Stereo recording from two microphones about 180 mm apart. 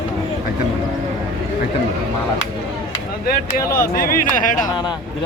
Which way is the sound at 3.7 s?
55° left (ahead or behind).